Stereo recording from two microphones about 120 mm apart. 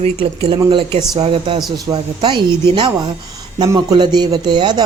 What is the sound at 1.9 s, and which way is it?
Speech, 40° right (ahead or behind).